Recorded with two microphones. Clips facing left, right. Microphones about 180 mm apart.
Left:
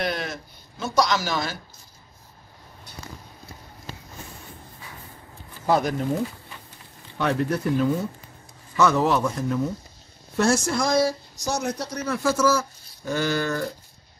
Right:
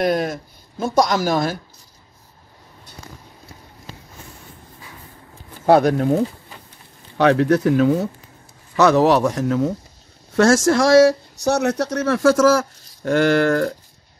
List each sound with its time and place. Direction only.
0.0 s speech: 45° right (ahead or behind)
5.7 s speech: 65° right (ahead or behind); by 13.1 s 90° right
13.1 s speech: 55° right (ahead or behind)
13.4 s speech: 90° right